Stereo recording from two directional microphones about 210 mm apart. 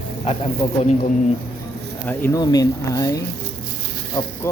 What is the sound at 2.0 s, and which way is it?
Speech, 15° left (ahead or behind).